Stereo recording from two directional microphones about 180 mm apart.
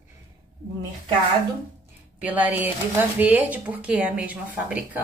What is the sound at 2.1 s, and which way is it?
A woman's voice, 10° right (ahead or behind).